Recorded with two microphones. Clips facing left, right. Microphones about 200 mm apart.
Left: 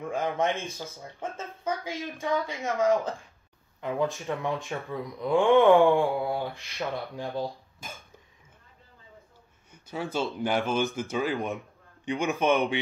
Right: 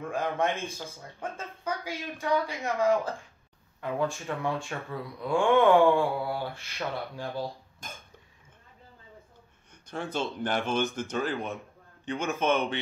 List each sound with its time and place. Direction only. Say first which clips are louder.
0.0 s speech: left 1 dB; 15° left (ahead or behind)
1.2 s speech: left 1 dB; 15° right (ahead or behind)
1.6 s a sound: left 3 dB; 15° left (ahead or behind)
2.1 s speech: right 2 dB; 15° left (ahead or behind)
9.7 s a sound: left 2 dB; 5° left (ahead or behind)
10.3 s speech: left 2 dB; 10° left (ahead or behind)